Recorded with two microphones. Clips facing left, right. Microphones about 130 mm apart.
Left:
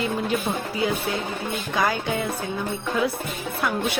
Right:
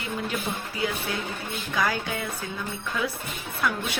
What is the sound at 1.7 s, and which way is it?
Speech, 30° left (ahead or behind).